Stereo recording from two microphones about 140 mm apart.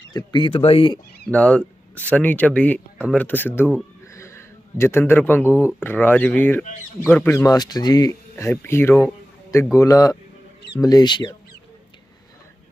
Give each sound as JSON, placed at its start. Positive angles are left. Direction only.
{"t": 0.1, "sound": "speech", "side_deg": 30}
{"t": 1.3, "sound": "speech", "side_deg": 10}
{"t": 4.0, "sound": "a sound", "side_deg": 20}
{"t": 5.6, "sound": "speech", "side_deg": 15}